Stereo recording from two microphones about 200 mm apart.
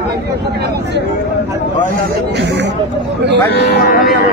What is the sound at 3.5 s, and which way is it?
Speech, 55° left (ahead or behind).